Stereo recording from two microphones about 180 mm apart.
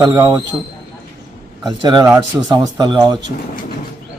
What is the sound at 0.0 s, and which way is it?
Speech, 20° right (ahead or behind).